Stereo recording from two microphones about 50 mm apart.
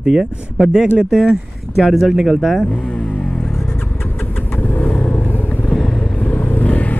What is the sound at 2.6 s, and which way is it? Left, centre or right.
Vehicle, left.